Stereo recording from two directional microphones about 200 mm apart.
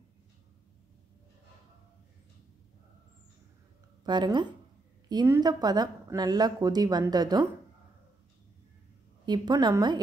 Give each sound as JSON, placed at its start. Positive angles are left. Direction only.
{"t": 4.0, "sound": "speech", "side_deg": -20}
{"t": 9.2, "sound": "speech", "side_deg": -20}